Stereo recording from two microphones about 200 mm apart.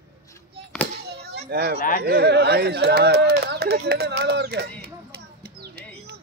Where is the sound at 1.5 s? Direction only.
55° right (ahead or behind).